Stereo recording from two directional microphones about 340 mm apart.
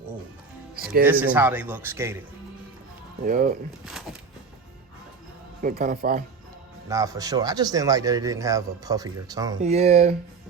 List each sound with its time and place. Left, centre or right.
1.0 s speech: centre
3.2 s speech: right
5.6 s speech: right
6.8 s speech: centre